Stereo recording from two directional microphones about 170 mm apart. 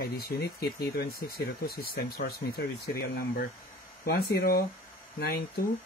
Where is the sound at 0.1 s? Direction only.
65° left (ahead or behind).